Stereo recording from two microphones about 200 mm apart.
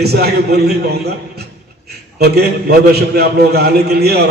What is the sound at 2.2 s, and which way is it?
A man's voice, 50° right (ahead or behind).